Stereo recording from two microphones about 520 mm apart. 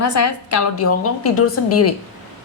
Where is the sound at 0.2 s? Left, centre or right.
Left.